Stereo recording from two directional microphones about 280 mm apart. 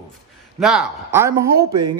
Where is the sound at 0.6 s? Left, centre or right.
Centre.